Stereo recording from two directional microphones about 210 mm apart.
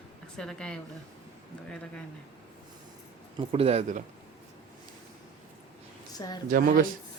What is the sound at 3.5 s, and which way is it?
Speech, 30° right (ahead or behind).